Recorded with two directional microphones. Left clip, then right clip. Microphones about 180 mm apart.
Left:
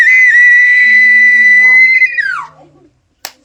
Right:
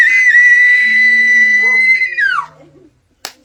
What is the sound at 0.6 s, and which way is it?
Whistle, 30° right (ahead or behind).